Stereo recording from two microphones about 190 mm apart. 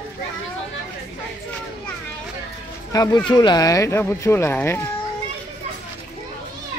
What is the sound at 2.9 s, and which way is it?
Speech, 20° left (ahead or behind).